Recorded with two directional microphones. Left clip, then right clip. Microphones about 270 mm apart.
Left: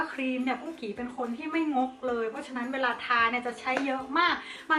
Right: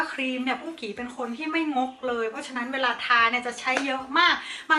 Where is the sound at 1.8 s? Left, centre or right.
Left.